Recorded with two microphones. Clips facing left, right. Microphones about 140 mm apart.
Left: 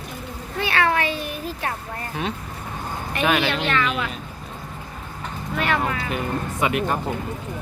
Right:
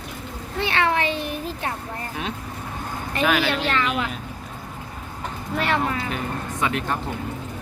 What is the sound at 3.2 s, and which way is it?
Speech, centre (ahead or behind).